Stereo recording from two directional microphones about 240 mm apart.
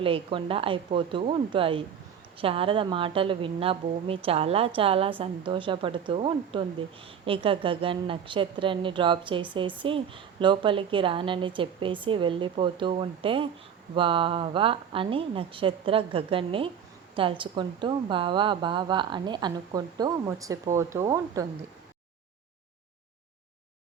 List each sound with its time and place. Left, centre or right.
0.0 s a woman's voice: right